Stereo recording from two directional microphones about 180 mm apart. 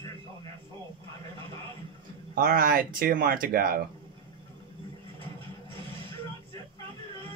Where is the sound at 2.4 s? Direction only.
55° right (ahead or behind).